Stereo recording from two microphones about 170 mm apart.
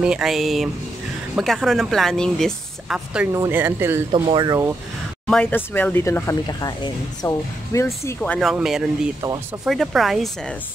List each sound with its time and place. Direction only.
0.0 s speech: 5° right (ahead or behind)
4.1 s speech: 30° right (ahead or behind)
5.3 s speech: 10° left (ahead or behind)